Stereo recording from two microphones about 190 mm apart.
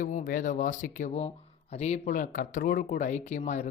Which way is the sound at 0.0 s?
40° left (ahead or behind).